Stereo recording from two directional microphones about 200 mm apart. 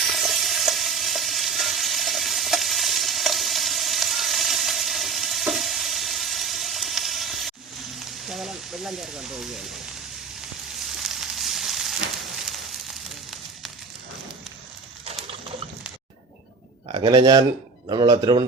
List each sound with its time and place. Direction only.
0.2 s frying: centre (ahead or behind)
8.3 s sizzle: centre (ahead or behind)
11.0 s sizzle: centre (ahead or behind)
16.9 s speech: 25° right (ahead or behind)